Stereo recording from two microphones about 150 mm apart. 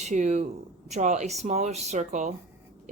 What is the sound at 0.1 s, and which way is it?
Speech, 55° right (ahead or behind).